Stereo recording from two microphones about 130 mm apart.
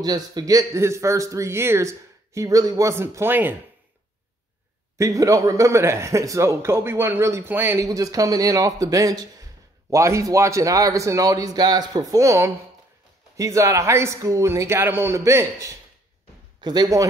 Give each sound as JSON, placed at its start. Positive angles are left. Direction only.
{"t": 0.0, "sound": "speech", "side_deg": -30}
{"t": 4.9, "sound": "speech", "side_deg": -25}